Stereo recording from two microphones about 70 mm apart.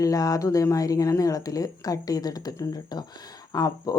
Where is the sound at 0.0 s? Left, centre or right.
Left.